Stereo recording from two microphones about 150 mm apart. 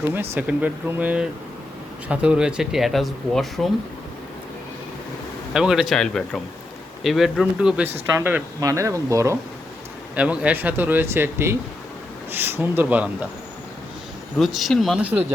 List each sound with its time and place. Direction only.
0.1 s speech: 10° right (ahead or behind)
5.5 s speech: 5° right (ahead or behind); by 9.4 s 20° right (ahead or behind)
10.2 s speech: 10° right (ahead or behind)
14.3 s speech: centre (ahead or behind)